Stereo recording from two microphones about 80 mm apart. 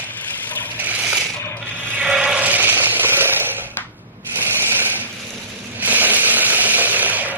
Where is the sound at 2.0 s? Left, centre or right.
Centre; by 3.6 s right.